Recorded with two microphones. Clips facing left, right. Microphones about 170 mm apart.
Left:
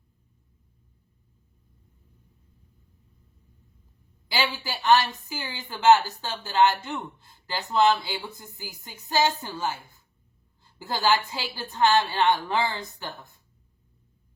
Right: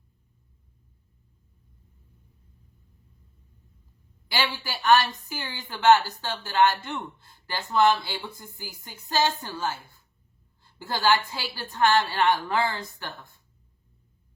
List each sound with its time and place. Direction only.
4.6 s speech: 20° left (ahead or behind)